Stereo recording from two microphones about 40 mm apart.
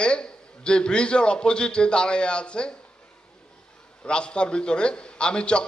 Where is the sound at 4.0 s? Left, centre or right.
Left.